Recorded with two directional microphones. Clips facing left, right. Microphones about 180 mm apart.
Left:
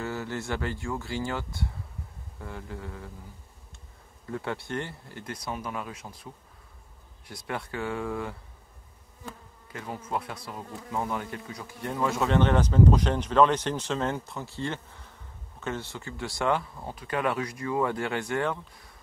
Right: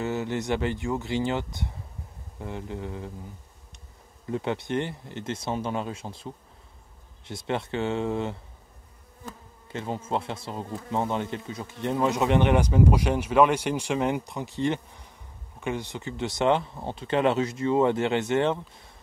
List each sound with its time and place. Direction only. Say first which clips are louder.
0.0 s speech: right 5 dB; 20° right (ahead or behind)
4.3 s speech: right 5 dB; 20° right (ahead or behind)
9.7 s speech: right 5 dB; 25° right (ahead or behind)